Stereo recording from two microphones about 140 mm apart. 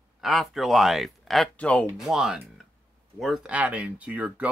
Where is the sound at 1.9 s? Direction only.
5° right (ahead or behind).